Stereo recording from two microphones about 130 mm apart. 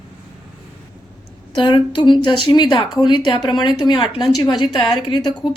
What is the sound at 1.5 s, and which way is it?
A woman's voice, 40° left (ahead or behind).